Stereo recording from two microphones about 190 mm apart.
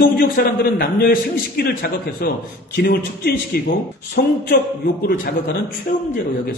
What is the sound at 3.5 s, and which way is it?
Speech, 55° left (ahead or behind).